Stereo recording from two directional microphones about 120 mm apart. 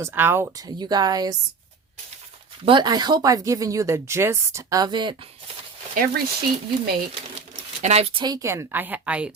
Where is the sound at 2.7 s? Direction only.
40° right (ahead or behind).